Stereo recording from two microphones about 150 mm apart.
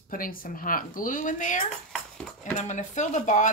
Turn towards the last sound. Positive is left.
turn(degrees=55)  # may be behind; listen again after turning